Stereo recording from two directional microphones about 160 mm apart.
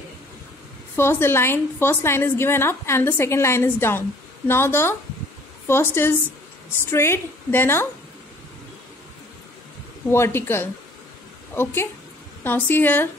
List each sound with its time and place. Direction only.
0.9 s a woman's voice: 15° left (ahead or behind)
10.1 s a woman's voice: 15° left (ahead or behind)